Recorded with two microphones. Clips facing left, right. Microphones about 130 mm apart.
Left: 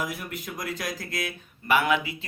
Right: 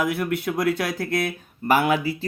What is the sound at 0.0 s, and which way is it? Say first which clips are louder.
Speech: right 9 dB; 65° right (ahead or behind).